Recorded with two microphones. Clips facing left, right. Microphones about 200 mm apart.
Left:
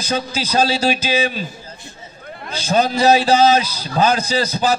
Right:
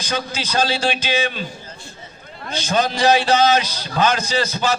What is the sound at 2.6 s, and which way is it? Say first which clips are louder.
A man's voice: left 3 dB; 30° left (ahead or behind).